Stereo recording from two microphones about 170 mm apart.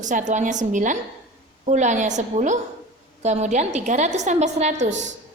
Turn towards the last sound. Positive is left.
turn(degrees=-40)  # may be behind; listen again after turning